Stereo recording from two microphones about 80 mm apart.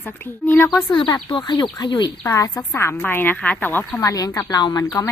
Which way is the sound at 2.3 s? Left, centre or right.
Left.